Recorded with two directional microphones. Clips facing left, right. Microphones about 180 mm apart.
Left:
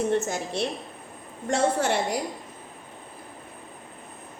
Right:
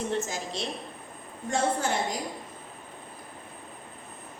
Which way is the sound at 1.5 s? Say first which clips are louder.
Left 4 dB; 75° left (ahead or behind).